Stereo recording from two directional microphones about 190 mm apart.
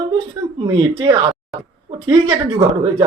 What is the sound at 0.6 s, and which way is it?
Speech, 25° right (ahead or behind).